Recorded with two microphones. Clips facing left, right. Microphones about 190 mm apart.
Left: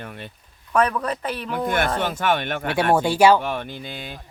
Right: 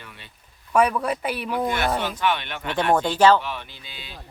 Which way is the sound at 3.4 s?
50° left (ahead or behind).